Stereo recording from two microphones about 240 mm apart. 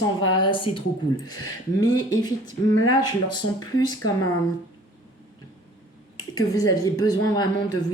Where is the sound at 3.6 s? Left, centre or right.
Centre.